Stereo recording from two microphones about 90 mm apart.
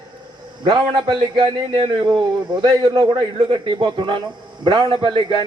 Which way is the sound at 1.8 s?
50° right (ahead or behind).